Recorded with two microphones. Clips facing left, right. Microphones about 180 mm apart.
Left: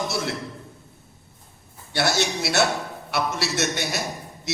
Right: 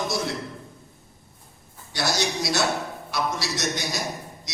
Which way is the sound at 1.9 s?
65° left (ahead or behind).